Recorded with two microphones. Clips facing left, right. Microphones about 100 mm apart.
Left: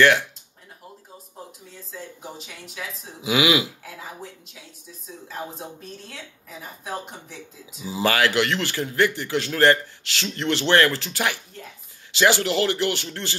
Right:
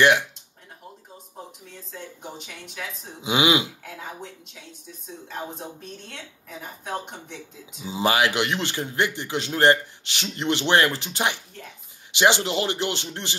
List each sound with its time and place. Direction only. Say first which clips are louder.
0.0 s speech: left 1 dB; 15° right (ahead or behind)
1.7 s a woman's voice: left 1 dB; centre (ahead or behind)
3.2 s a man's voice: left 1 dB; 25° right (ahead or behind)
3.8 s a woman's voice: right 1 dB; centre (ahead or behind)
7.8 s a man's voice: even; 20° right (ahead or behind)